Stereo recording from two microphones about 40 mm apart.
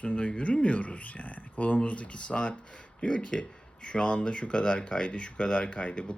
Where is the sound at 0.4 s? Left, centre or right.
Left.